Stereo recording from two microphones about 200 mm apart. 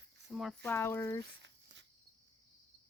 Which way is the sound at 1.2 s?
60° right (ahead or behind).